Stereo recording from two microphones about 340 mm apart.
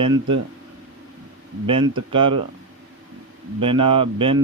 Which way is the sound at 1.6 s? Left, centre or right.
Centre.